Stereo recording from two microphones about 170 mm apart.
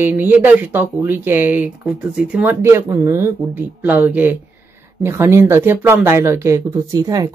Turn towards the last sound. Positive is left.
turn(degrees=-20)  # may be behind; listen again after turning